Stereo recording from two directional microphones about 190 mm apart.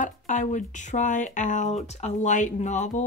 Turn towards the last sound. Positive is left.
turn(degrees=40)  # may be behind; listen again after turning